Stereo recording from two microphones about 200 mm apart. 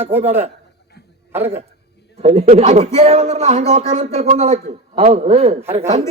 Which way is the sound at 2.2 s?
30° right (ahead or behind).